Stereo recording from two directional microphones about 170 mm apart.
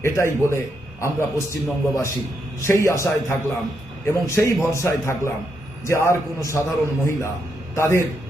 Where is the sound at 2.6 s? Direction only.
15° left (ahead or behind).